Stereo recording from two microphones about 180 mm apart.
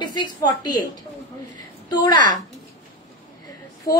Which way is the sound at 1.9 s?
25° left (ahead or behind).